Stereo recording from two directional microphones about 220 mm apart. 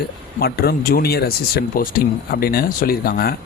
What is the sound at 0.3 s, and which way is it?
Speech, 45° left (ahead or behind).